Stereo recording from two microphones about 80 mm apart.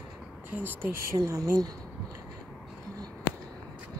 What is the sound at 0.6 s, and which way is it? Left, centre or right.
Speech, right.